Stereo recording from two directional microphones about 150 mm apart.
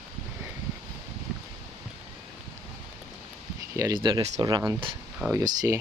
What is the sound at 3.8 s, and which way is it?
Speech, 25° right (ahead or behind).